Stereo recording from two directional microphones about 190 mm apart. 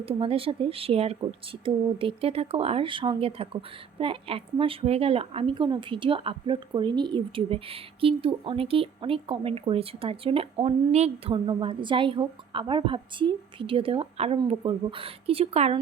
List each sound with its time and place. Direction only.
0.0 s speech: 30° right (ahead or behind)